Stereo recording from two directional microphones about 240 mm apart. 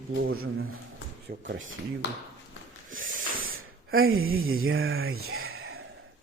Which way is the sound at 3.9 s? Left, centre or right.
Right.